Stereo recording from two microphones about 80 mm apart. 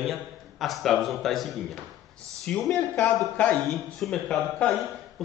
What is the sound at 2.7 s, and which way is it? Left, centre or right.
Speech, centre.